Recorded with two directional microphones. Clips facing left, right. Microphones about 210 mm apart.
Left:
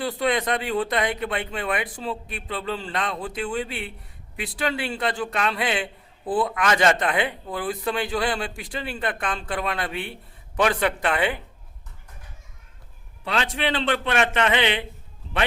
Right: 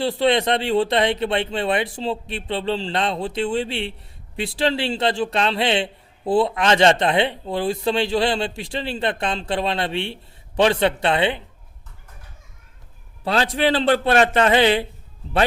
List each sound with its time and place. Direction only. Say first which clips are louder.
0.0 s a man's voice: right 5 dB; 30° right (ahead or behind)
13.2 s a man's voice: right 6 dB; 35° right (ahead or behind)